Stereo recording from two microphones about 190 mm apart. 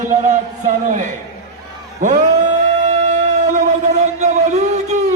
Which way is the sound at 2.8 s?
40° right (ahead or behind).